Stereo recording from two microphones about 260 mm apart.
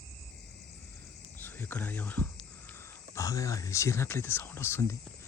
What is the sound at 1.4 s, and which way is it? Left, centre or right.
Speech, centre.